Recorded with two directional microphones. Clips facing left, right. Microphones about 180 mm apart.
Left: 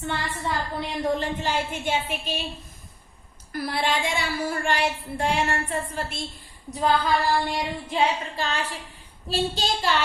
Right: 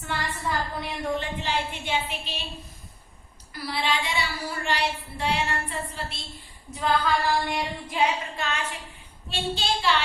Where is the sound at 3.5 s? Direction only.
50° left (ahead or behind).